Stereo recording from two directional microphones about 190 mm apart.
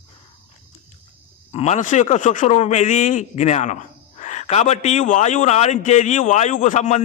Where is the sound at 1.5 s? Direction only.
35° left (ahead or behind).